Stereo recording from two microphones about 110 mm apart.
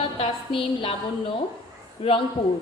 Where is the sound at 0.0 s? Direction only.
50° left (ahead or behind).